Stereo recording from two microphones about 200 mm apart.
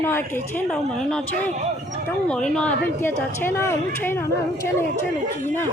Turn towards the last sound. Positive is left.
turn(degrees=10)  # may be behind; listen again after turning